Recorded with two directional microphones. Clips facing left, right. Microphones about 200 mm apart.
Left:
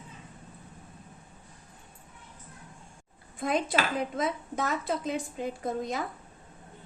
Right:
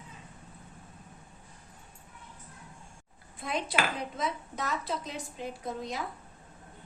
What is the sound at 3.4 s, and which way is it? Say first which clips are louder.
A woman's voice: left 4 dB; 50° left (ahead or behind).